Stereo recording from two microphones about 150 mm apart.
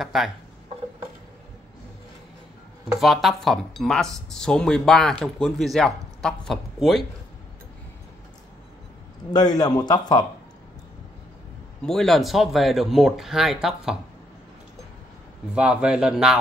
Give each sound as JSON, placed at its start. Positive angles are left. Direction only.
{"t": 0.0, "sound": "speech", "side_deg": 0}
{"t": 2.9, "sound": "speech", "side_deg": 0}
{"t": 9.3, "sound": "a man's voice", "side_deg": 25}
{"t": 11.8, "sound": "speech", "side_deg": 5}
{"t": 15.5, "sound": "speech", "side_deg": -5}